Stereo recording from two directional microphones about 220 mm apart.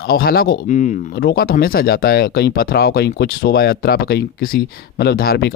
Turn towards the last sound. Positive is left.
turn(degrees=45)  # may be behind; listen again after turning